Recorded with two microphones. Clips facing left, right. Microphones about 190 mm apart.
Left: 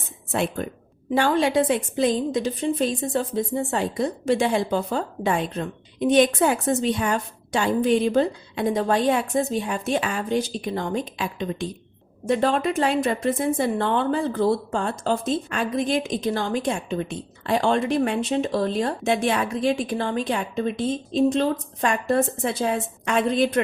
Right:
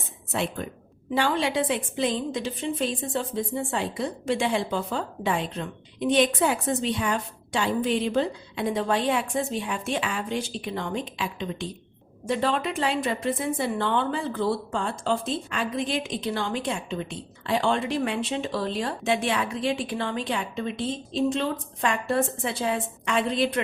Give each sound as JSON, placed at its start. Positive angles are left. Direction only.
{"t": 0.3, "sound": "speech", "side_deg": 50}